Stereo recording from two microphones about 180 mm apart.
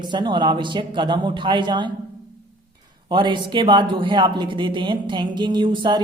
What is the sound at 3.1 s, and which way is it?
Speech, 25° right (ahead or behind).